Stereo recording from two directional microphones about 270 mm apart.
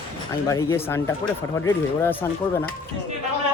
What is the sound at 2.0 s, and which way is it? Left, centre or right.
Speech, centre.